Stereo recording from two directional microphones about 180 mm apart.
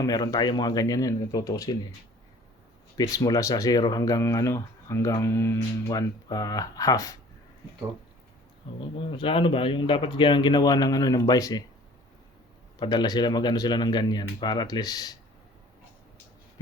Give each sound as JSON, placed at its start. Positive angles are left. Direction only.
{"t": 0.0, "sound": "speech", "side_deg": 20}
{"t": 3.0, "sound": "speech", "side_deg": 20}
{"t": 8.7, "sound": "speech", "side_deg": 25}
{"t": 12.8, "sound": "speech", "side_deg": 25}